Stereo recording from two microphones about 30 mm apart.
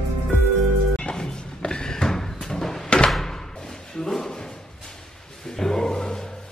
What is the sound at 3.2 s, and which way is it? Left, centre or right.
Thump, centre.